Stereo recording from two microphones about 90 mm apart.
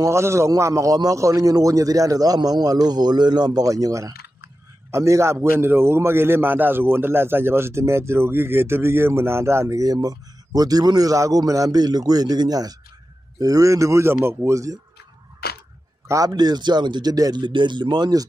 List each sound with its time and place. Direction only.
0.0 s a man's voice: 30° right (ahead or behind)
14.5 s speech: 35° right (ahead or behind)
16.3 s a man's voice: 50° right (ahead or behind)